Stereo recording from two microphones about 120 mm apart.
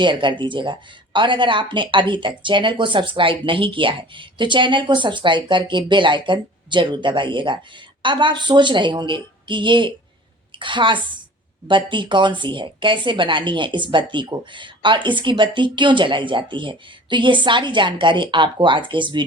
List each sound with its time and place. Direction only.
0.0 s a woman's voice: 40° right (ahead or behind)